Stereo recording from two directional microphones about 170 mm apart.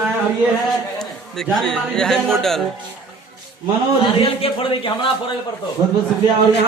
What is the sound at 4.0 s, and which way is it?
A man's voice, 35° left (ahead or behind).